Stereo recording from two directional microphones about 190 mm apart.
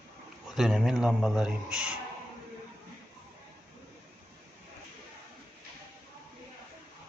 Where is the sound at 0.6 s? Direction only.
5° right (ahead or behind).